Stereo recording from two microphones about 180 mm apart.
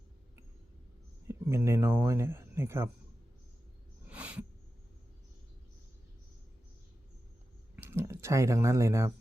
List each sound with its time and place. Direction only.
1.3 s speech: 15° right (ahead or behind)
4.0 s a sound: 10° right (ahead or behind)
7.8 s speech: 15° right (ahead or behind)